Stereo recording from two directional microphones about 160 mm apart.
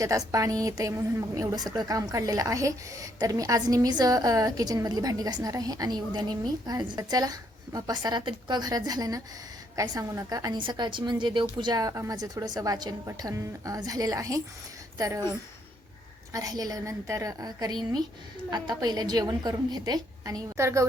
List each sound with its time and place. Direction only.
0.0 s a woman's voice: 20° right (ahead or behind)
16.3 s a woman's voice: 25° right (ahead or behind)